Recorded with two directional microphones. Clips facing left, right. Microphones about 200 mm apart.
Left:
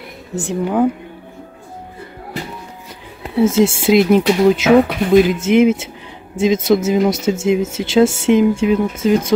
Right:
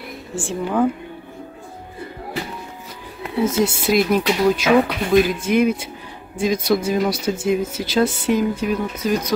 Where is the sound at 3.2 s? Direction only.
25° left (ahead or behind).